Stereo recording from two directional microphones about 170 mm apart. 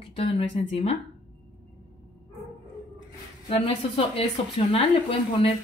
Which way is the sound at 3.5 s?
35° left (ahead or behind).